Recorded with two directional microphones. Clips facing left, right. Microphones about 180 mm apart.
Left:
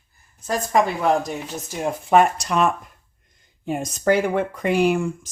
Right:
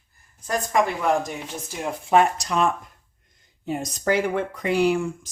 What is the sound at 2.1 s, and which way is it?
Speech, 60° left (ahead or behind).